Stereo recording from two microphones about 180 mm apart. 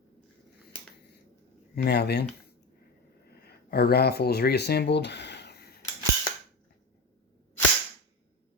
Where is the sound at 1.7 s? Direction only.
60° left (ahead or behind).